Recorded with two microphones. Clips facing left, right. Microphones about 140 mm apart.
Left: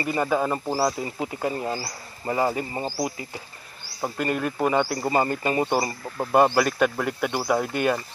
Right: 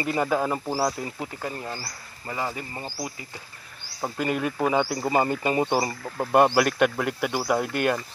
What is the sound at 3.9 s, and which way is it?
Speech, centre (ahead or behind).